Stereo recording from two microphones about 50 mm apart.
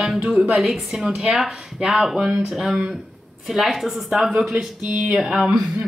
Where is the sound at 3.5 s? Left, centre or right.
Centre.